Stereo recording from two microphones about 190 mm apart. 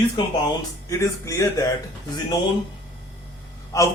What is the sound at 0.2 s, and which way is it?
A man's voice, 25° left (ahead or behind).